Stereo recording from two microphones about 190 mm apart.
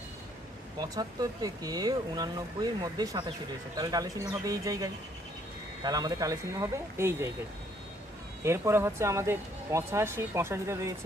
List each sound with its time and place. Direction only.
0.8 s speech: 20° right (ahead or behind)
8.4 s speech: 15° right (ahead or behind)